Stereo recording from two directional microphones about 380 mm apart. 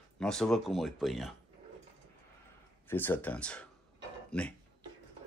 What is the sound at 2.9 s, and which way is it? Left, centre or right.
Speech, centre.